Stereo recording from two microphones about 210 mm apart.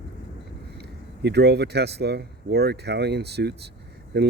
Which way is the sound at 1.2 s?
50° right (ahead or behind).